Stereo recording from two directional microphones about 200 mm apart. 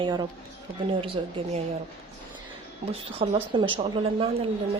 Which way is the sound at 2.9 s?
25° right (ahead or behind).